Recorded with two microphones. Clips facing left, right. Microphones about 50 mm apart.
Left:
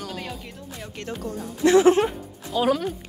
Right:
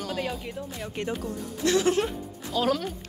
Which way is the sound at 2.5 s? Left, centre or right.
Centre.